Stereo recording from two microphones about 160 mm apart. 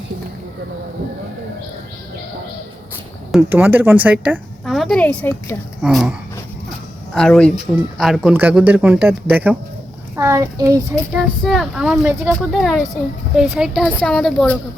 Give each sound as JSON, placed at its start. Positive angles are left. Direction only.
{"t": 3.3, "sound": "a woman's voice", "side_deg": -10}
{"t": 5.8, "sound": "speech", "side_deg": -5}
{"t": 11.1, "sound": "speech", "side_deg": 0}